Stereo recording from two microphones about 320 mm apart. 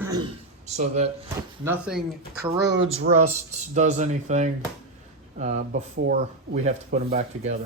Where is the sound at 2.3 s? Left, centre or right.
Right.